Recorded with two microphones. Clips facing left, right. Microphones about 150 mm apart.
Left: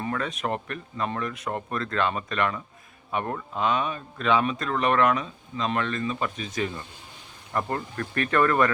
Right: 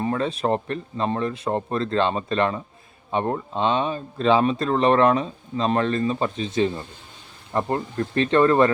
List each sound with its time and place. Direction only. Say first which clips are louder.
0.0 s speech: right 6 dB; 30° right (ahead or behind)